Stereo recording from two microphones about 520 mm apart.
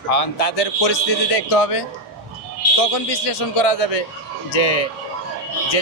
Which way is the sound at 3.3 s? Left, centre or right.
Left.